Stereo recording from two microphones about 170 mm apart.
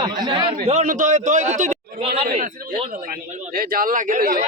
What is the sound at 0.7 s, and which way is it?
A man's voice, 45° right (ahead or behind).